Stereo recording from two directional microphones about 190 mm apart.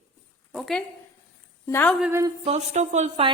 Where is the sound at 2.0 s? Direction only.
15° right (ahead or behind).